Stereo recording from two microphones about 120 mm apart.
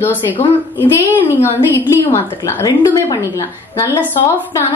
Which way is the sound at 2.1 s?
30° left (ahead or behind).